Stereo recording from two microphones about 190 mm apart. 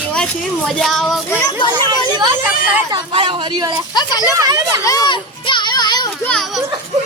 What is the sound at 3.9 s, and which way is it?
Speech, 20° left (ahead or behind).